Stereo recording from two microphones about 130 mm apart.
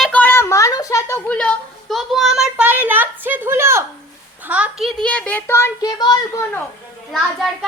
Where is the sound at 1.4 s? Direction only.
5° left (ahead or behind).